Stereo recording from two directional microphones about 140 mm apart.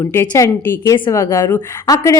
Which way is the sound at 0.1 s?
20° left (ahead or behind).